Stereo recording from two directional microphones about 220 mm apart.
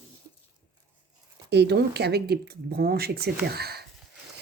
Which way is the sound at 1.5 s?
50° right (ahead or behind).